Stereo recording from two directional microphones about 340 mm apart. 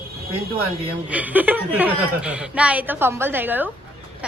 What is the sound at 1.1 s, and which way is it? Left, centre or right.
A woman's voice, centre.